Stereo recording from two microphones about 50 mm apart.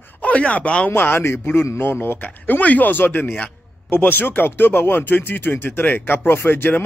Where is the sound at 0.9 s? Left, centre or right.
Left.